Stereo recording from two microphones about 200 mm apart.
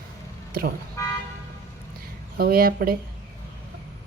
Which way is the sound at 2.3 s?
50° right (ahead or behind).